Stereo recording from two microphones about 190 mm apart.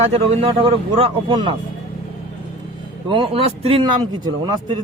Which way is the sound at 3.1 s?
25° right (ahead or behind).